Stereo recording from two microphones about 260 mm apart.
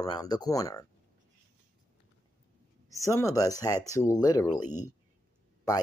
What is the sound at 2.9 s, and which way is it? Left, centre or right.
Speech, centre.